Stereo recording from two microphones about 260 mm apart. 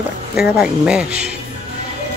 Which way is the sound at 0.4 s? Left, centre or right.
Centre.